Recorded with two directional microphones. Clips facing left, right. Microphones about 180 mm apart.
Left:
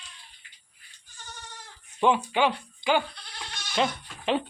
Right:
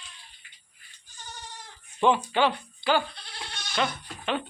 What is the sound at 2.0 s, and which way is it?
Speech, 10° left (ahead or behind).